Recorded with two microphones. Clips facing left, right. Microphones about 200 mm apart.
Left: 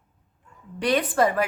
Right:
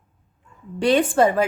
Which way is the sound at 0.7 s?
25° right (ahead or behind).